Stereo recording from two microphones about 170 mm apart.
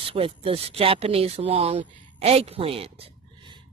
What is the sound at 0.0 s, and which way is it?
Speech, 35° right (ahead or behind).